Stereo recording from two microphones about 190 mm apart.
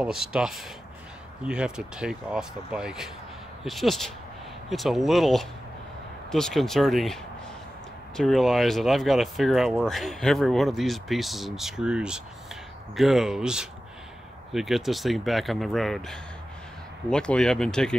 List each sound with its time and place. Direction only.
0.0 s speech: 5° right (ahead or behind)
8.2 s speech: centre (ahead or behind)